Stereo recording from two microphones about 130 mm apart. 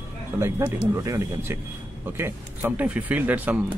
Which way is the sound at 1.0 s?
20° right (ahead or behind).